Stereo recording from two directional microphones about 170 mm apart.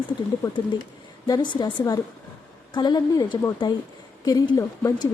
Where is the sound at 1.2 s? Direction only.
25° left (ahead or behind).